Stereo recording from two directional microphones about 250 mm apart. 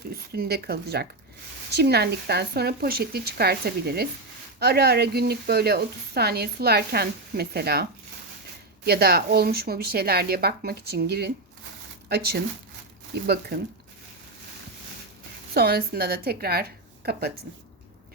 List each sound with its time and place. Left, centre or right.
0.1 s speech: right
15.5 s speech: right